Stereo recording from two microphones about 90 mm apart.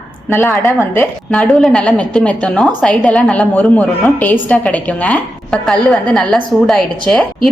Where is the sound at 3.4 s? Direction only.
15° left (ahead or behind).